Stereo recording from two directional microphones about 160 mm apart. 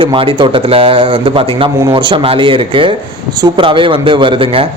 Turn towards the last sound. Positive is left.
turn(degrees=-35)  # may be behind; listen again after turning